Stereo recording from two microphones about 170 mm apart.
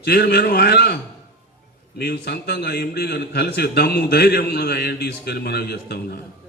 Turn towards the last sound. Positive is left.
turn(degrees=70)  # may be behind; listen again after turning